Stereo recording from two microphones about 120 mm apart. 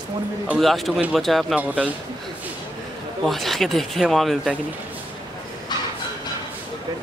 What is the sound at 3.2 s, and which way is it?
Speech, centre (ahead or behind).